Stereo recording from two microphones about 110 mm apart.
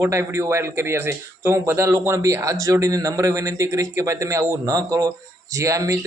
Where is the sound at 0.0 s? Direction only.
25° right (ahead or behind).